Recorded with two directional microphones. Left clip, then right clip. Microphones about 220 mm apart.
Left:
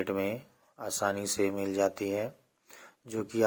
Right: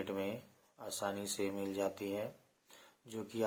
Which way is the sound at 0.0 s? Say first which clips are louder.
Left 8 dB; 30° left (ahead or behind).